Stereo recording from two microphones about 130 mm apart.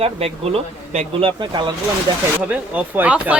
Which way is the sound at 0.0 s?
50° right (ahead or behind).